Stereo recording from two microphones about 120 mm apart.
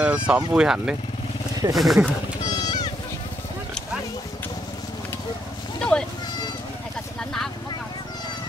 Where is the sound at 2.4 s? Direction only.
35° left (ahead or behind).